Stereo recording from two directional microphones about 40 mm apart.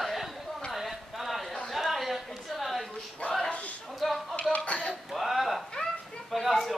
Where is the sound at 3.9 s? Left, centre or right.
Centre.